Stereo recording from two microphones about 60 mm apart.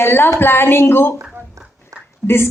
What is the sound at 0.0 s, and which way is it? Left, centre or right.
A woman's voice, left.